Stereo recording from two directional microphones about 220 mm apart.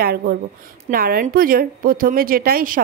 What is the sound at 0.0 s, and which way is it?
A woman's voice, 45° right (ahead or behind).